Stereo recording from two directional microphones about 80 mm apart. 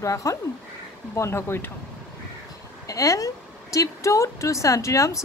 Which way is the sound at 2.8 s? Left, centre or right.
Left.